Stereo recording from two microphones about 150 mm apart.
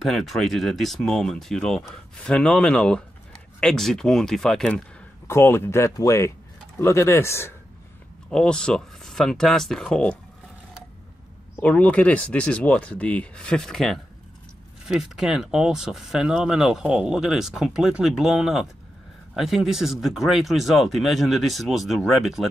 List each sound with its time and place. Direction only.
0.0 s speech: centre (ahead or behind)
5.3 s speech: 15° left (ahead or behind)
8.3 s speech: 5° left (ahead or behind)
11.6 s speech: 10° left (ahead or behind)